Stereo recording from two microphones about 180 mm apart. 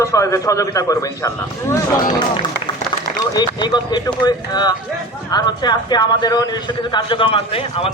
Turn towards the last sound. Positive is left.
turn(degrees=30)  # may be behind; listen again after turning